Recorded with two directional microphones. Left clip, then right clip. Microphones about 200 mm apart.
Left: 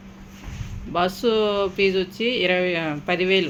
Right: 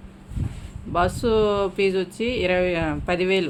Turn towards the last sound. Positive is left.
turn(degrees=-5)  # may be behind; listen again after turning